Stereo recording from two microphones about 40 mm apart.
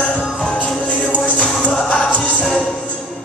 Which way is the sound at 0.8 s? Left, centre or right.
Left.